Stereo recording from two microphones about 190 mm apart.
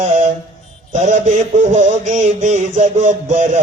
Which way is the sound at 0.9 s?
40° right (ahead or behind).